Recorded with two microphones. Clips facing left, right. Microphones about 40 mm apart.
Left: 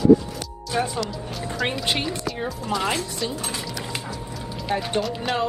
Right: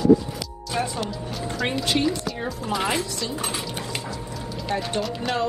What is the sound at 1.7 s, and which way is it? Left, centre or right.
Speech, centre.